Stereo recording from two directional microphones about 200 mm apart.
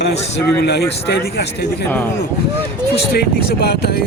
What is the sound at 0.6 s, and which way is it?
Speech, 55° left (ahead or behind).